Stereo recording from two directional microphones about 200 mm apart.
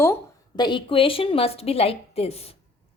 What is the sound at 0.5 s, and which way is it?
A woman's voice, 20° left (ahead or behind).